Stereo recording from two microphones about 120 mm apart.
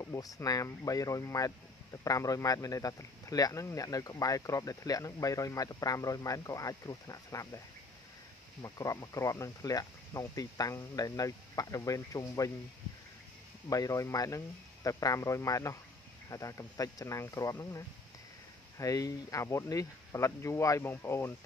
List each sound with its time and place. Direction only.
0.0 s speech: 25° left (ahead or behind)
8.6 s speech: 25° left (ahead or behind)
13.7 s speech: 30° left (ahead or behind)